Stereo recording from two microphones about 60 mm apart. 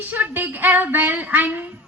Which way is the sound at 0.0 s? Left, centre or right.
Right.